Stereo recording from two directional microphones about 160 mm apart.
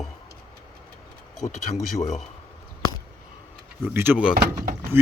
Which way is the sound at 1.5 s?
45° left (ahead or behind).